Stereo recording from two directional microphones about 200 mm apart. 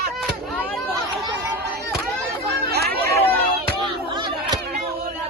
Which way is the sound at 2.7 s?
50° right (ahead or behind).